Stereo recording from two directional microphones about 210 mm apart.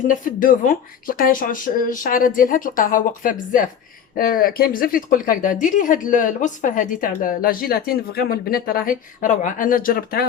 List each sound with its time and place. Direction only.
0.1 s speech: 40° left (ahead or behind)